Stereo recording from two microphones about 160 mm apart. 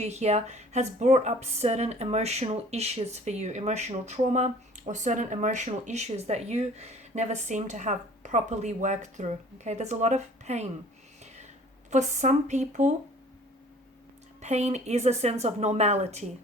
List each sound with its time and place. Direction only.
0.0 s speech: 45° right (ahead or behind)
11.9 s speech: 45° right (ahead or behind)
14.4 s speech: 45° right (ahead or behind)